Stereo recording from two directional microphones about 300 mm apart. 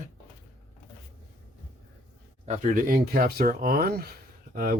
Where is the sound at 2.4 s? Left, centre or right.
Right.